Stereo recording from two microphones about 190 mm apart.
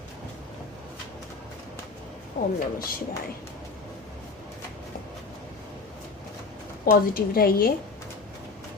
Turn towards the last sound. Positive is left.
turn(degrees=50)  # may be behind; listen again after turning